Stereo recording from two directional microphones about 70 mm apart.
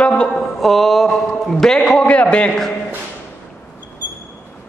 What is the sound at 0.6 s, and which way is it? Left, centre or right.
A man's voice, centre.